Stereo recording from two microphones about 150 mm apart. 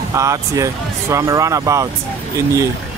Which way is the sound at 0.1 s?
20° right (ahead or behind).